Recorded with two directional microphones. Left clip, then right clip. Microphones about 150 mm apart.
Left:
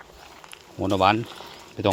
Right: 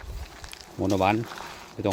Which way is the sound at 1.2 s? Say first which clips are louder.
Right 2 dB; 15° left (ahead or behind).